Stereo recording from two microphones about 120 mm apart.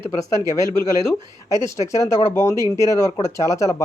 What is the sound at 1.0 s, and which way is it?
Speech, 30° left (ahead or behind).